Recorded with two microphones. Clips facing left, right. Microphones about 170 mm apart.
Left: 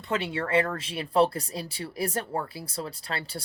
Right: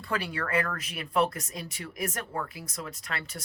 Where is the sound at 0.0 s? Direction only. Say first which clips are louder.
Left 3 dB; 25° left (ahead or behind).